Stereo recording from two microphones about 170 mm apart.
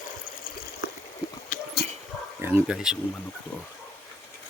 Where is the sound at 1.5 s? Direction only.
50° left (ahead or behind).